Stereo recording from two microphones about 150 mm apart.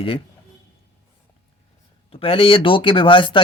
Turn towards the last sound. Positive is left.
turn(degrees=35)  # may be behind; listen again after turning